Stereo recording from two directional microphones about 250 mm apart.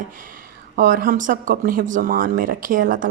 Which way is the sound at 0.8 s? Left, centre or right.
Right.